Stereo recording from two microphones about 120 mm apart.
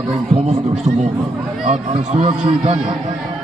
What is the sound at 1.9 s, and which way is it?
Speech, 60° right (ahead or behind).